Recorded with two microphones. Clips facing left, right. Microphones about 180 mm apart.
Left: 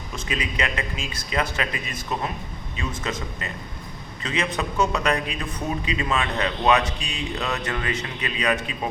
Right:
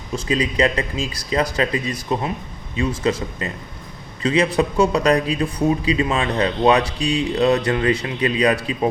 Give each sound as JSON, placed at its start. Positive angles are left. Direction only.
{"t": 0.3, "sound": "a man's voice", "side_deg": -30}